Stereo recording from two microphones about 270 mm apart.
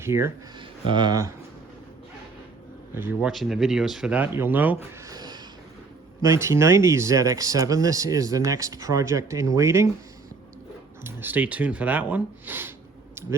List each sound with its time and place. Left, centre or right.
0.0 s speech: centre
2.9 s speech: centre
11.0 s speech: centre